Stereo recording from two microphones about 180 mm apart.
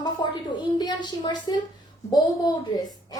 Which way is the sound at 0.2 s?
20° left (ahead or behind).